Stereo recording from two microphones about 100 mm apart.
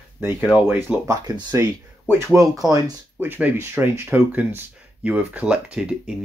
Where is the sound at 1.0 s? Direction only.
40° right (ahead or behind).